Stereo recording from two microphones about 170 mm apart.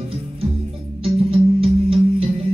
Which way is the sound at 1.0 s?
35° right (ahead or behind).